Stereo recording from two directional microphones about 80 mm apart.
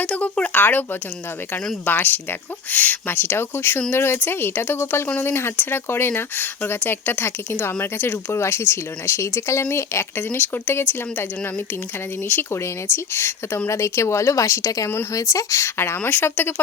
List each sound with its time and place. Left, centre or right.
0.0 s speech: centre
12.3 s speech: left